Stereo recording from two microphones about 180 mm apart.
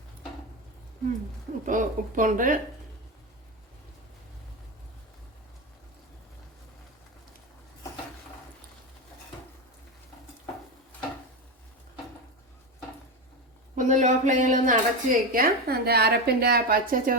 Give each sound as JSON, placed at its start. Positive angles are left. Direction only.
{"t": 1.6, "sound": "a woman's voice", "side_deg": -45}
{"t": 13.7, "sound": "a woman's voice", "side_deg": -45}